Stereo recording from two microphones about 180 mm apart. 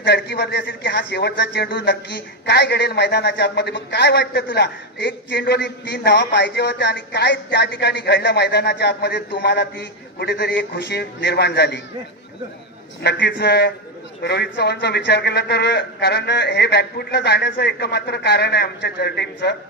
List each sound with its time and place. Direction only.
0.0 s speech: 65° left (ahead or behind)
13.0 s speech: 70° left (ahead or behind)